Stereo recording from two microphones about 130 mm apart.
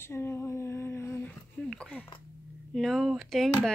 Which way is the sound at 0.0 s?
20° left (ahead or behind).